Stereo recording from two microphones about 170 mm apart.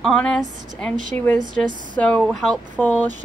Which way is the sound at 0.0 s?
5° left (ahead or behind).